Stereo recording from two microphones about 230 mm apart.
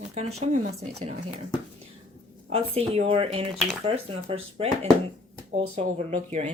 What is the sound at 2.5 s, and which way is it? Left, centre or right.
Speech, right.